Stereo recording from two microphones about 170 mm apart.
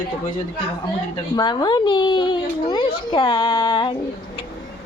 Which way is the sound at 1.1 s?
25° left (ahead or behind).